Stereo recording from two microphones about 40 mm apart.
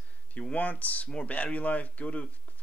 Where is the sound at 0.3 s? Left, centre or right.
Left.